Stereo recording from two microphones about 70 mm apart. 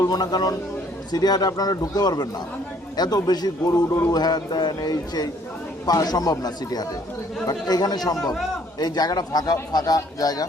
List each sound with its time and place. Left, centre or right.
0.1 s a man's voice: left
3.9 s a man's voice: left
4.2 s a man's voice: left